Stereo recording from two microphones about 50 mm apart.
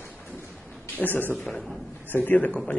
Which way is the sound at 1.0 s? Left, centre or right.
Left.